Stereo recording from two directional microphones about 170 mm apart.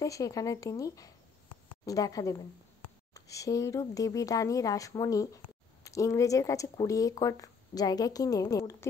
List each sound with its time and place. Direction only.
0.0 s speech: 20° left (ahead or behind)